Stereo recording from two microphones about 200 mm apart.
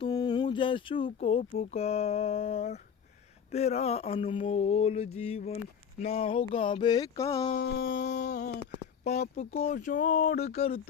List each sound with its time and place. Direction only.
0.0 s speech: 20° left (ahead or behind)
3.5 s mantra: 30° left (ahead or behind)
6.4 s speech: 25° left (ahead or behind)
7.6 s mantra: 55° left (ahead or behind); by 10.8 s 30° left (ahead or behind)